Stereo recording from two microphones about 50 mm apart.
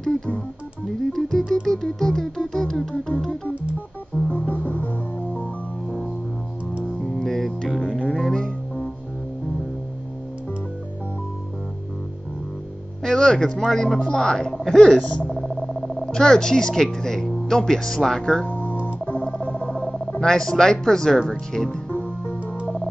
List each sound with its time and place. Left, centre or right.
1.1 s music: centre
4.3 s music: left
5.9 s music: centre
7.0 s music: centre
13.0 s music: centre
13.6 s music: centre
15.2 s speech: centre
18.5 s music: left
19.0 s telephone: left
19.3 s telephone dialing: left
20.2 s music: centre
21.9 s music: left